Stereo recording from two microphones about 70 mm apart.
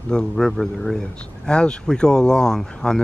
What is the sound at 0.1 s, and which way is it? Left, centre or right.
Speech, centre.